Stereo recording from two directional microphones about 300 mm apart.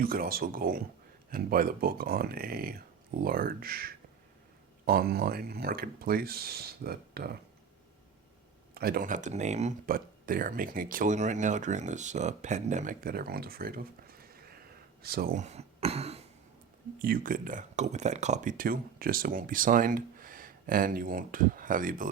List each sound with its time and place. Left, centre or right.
0.0 s speech: right
8.7 s speech: right